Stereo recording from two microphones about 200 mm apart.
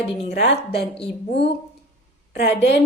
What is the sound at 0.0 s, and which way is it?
Speech, 30° left (ahead or behind).